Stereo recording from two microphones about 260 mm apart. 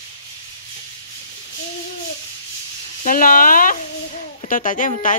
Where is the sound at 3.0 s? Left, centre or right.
Left.